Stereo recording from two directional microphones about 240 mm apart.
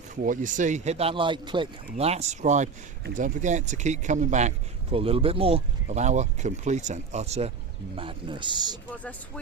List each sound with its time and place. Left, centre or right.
0.3 s speech: right; by 8.8 s centre